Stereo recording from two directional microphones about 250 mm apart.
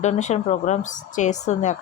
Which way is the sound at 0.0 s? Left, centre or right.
Left.